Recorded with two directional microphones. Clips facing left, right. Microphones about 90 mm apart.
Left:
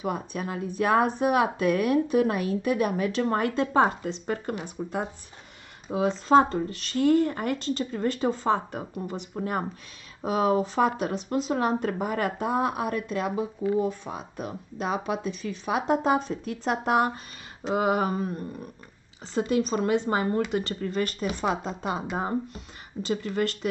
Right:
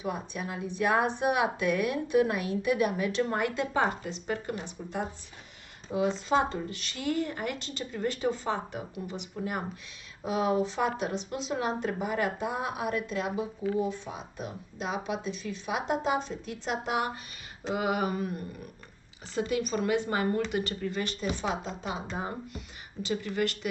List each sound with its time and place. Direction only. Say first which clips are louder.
0.0 s speech: left 4 dB; 45° left (ahead or behind)
20.8 s speech: left 4 dB; 45° left (ahead or behind)